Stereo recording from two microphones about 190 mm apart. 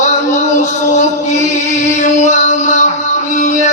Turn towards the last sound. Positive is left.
turn(degrees=40)  # may be behind; listen again after turning